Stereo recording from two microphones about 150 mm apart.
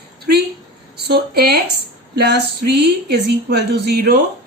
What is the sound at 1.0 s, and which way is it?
Speech, 90° right.